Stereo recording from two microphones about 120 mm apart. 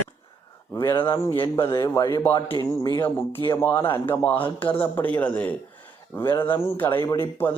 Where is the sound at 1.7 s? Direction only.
25° left (ahead or behind).